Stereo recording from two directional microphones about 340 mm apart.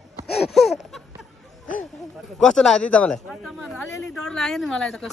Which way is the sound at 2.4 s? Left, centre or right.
Centre.